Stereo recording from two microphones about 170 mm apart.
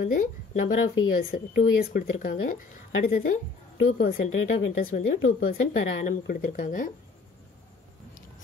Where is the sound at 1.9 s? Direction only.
40° left (ahead or behind).